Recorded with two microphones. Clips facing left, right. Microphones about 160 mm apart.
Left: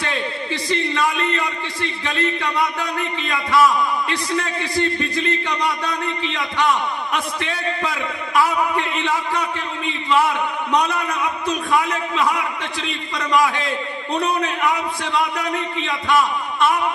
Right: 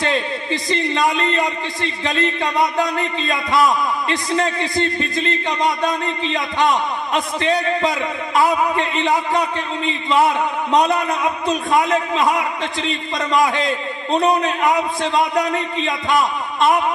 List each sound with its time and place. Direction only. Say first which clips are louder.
0.7 s a man's voice: right 2 dB; 20° right (ahead or behind)
6.2 s a man's voice: right 4 dB; 20° right (ahead or behind)
8.5 s a man's voice: right 3 dB; 20° right (ahead or behind)
10.9 s a man's voice: right 4 dB; 20° right (ahead or behind)
14.1 s a man's voice: right 5 dB; 20° right (ahead or behind)
16.1 s a man's voice: left 1 dB; 40° right (ahead or behind)